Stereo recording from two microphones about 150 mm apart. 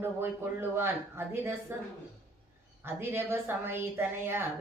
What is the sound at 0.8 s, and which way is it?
Speech, 15° right (ahead or behind).